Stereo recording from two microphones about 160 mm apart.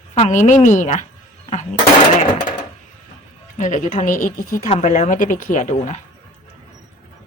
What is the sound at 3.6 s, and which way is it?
Speech, 50° left (ahead or behind).